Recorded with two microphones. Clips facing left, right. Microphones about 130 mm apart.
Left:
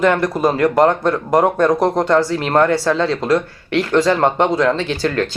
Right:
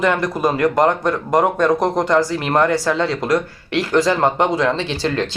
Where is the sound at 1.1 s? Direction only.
Centre (ahead or behind).